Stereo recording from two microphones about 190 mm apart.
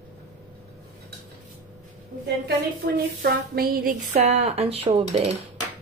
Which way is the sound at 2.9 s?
55° right (ahead or behind).